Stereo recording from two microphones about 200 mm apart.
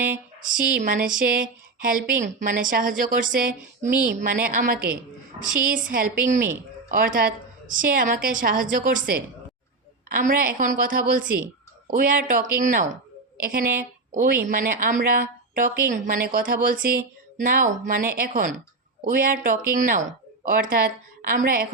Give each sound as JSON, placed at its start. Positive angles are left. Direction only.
{"t": 0.4, "sound": "a woman's voice", "side_deg": -40}